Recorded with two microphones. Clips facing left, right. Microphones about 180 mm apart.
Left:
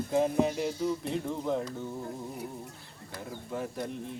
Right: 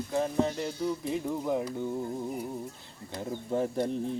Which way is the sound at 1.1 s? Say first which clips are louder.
Right 1 dB; 10° right (ahead or behind).